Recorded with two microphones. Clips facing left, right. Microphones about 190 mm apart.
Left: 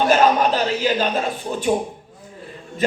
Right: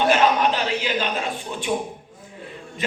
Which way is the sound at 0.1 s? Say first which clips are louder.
Left 3 dB; 40° left (ahead or behind).